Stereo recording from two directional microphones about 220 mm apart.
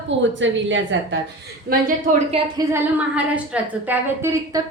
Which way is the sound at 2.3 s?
15° right (ahead or behind).